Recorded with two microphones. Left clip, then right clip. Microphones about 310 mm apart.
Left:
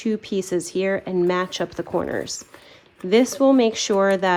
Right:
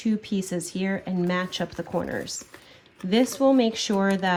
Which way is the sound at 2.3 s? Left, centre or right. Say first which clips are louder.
Left 2 dB; left.